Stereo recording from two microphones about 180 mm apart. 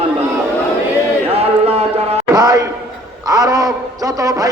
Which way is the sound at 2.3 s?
20° right (ahead or behind).